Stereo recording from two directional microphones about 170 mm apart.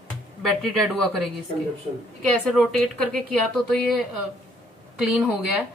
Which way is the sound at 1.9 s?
45° right (ahead or behind).